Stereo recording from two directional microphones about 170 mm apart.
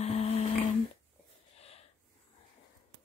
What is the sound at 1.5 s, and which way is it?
Snort, 35° left (ahead or behind).